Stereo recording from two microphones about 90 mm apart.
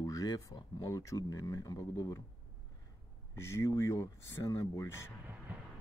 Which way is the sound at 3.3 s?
30° left (ahead or behind).